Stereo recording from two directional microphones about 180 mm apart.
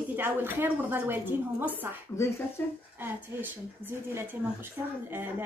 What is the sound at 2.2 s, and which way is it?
Speech, 15° left (ahead or behind).